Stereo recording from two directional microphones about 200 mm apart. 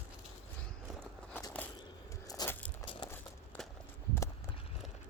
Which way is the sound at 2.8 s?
25° left (ahead or behind).